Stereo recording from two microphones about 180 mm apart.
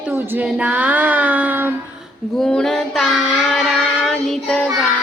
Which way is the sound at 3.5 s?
Centre (ahead or behind).